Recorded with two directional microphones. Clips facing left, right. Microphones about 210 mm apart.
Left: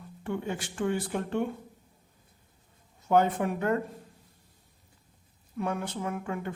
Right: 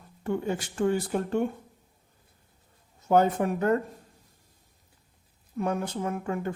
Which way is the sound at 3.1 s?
40° right (ahead or behind).